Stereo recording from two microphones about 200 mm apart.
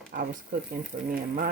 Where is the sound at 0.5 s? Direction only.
45° right (ahead or behind).